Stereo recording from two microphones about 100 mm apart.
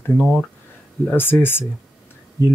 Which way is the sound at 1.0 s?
20° left (ahead or behind).